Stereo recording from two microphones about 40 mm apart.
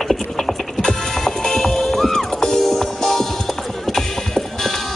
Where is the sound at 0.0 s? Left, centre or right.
Centre.